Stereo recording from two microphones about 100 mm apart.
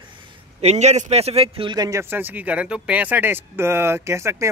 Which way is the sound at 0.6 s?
90° right.